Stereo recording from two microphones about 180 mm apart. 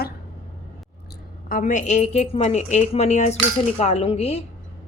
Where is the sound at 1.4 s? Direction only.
45° left (ahead or behind).